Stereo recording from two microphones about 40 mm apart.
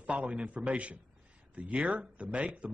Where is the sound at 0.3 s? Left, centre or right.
Right.